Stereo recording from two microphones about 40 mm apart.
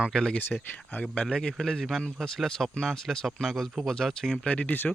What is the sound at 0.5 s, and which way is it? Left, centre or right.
Speech, centre.